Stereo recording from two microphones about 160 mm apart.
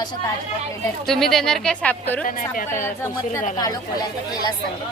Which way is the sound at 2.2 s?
60° left (ahead or behind).